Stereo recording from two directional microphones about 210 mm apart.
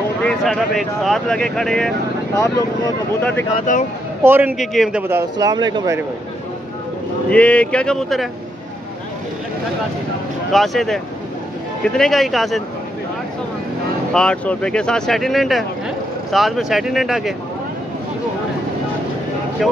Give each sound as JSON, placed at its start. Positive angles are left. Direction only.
{"t": 0.2, "sound": "speech", "side_deg": 0}
{"t": 3.2, "sound": "speech", "side_deg": 10}
{"t": 3.5, "sound": "speech", "side_deg": 40}
{"t": 4.2, "sound": "a man's voice", "side_deg": -10}
{"t": 5.0, "sound": "speech", "side_deg": -15}
{"t": 7.2, "sound": "speech", "side_deg": 5}
{"t": 10.5, "sound": "speech", "side_deg": 0}
{"t": 14.1, "sound": "speech", "side_deg": 5}